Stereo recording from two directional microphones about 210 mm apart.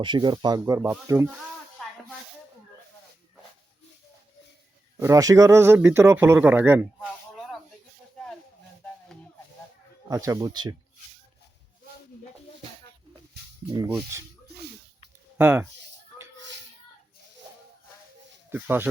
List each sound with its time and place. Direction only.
0.0 s a man's voice: 20° right (ahead or behind)
4.9 s a man's voice: 15° right (ahead or behind)
10.1 s a man's voice: 15° right (ahead or behind)
15.4 s a man's voice: 10° right (ahead or behind)
18.5 s a man's voice: 10° right (ahead or behind)